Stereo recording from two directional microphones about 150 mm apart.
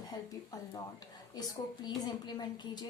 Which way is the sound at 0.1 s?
25° left (ahead or behind).